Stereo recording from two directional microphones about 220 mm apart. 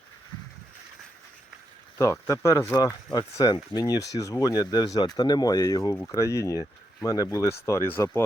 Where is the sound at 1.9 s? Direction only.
15° left (ahead or behind).